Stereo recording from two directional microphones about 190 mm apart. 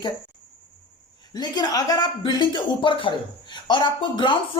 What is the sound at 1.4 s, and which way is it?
A woman's voice, 20° left (ahead or behind).